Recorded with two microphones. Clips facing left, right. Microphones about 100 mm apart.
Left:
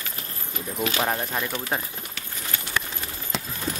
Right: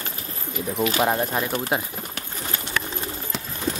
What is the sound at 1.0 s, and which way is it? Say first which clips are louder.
Speech: right 4 dB; 10° right (ahead or behind).